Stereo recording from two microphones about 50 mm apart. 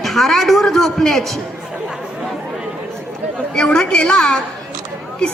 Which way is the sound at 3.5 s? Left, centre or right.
Centre.